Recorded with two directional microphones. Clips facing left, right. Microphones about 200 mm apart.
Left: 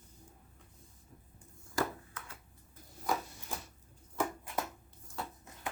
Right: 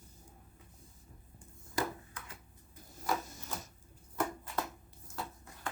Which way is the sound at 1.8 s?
20° right (ahead or behind).